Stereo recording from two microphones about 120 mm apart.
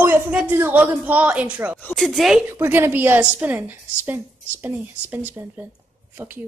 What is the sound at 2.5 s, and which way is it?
A woman's voice, 20° right (ahead or behind).